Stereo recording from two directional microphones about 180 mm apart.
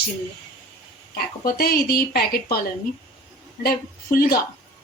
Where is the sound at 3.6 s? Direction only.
55° left (ahead or behind).